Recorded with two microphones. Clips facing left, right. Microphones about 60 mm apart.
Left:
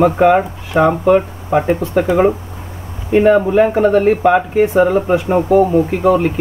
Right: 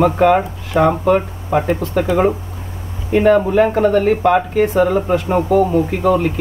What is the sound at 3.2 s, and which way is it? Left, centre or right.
Speech, centre.